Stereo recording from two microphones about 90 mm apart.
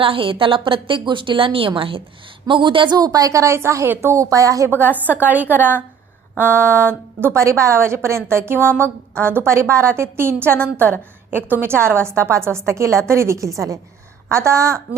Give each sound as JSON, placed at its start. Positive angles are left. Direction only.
{"t": 0.0, "sound": "a woman's voice", "side_deg": -80}
{"t": 2.5, "sound": "speech", "side_deg": -65}
{"t": 3.0, "sound": "a woman's voice", "side_deg": -40}
{"t": 4.7, "sound": "a woman's voice", "side_deg": -20}